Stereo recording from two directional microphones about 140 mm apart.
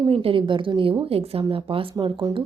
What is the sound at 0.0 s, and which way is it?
A woman's voice, 45° right (ahead or behind).